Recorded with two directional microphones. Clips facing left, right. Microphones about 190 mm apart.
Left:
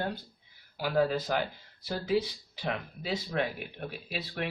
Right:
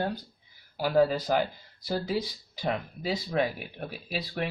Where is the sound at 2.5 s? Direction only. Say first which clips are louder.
Right 4 dB; 40° right (ahead or behind).